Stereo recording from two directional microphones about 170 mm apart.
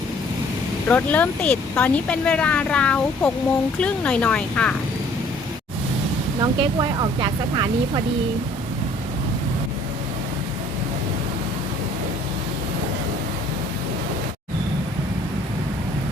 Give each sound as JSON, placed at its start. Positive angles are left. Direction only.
{"t": 0.9, "sound": "speech", "side_deg": 10}
{"t": 6.4, "sound": "speech", "side_deg": -25}